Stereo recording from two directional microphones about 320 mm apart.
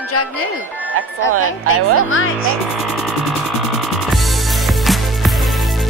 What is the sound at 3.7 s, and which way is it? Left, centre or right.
Music, centre.